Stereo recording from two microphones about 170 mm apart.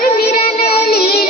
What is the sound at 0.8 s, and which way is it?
Child singing, 65° left (ahead or behind).